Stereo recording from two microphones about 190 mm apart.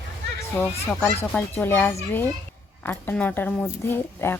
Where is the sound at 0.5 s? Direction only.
10° left (ahead or behind).